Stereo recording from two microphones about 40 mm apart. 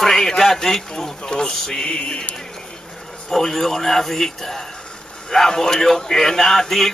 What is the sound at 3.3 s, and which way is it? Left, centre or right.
Speech, centre.